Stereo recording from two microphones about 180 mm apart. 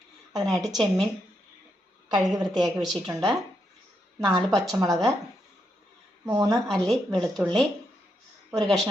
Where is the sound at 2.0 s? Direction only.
20° right (ahead or behind).